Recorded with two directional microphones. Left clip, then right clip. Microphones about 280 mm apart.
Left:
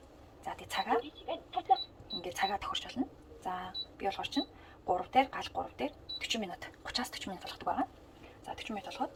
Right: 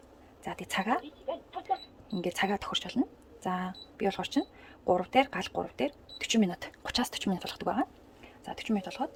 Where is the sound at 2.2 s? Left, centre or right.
Right.